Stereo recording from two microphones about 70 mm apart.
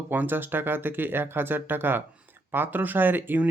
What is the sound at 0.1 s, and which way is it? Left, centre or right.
Speech, right.